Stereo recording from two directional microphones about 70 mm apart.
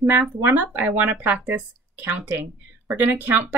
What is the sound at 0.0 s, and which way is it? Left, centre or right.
Speech, right.